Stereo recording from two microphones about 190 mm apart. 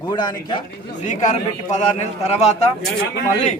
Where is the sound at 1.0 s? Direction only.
40° left (ahead or behind).